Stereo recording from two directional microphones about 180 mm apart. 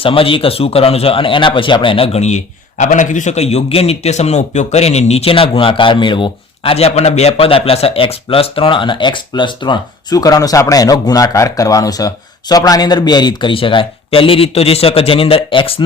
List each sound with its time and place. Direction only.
0.0 s a man's voice: 30° left (ahead or behind)